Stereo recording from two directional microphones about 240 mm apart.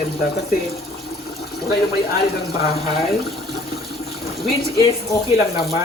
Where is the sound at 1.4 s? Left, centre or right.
Left.